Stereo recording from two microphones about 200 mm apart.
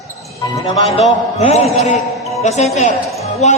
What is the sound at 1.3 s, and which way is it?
Speech, 35° left (ahead or behind).